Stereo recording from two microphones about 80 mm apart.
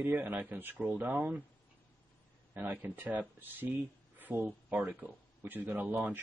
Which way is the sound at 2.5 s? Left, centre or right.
Right.